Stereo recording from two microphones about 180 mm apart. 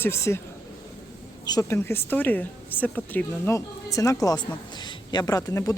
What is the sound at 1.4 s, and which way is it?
A woman's voice, 20° left (ahead or behind).